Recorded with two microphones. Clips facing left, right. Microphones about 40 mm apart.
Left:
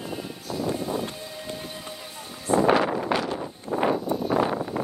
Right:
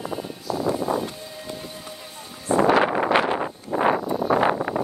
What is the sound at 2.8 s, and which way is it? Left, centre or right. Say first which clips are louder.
Wind noise: right 4 dB; right.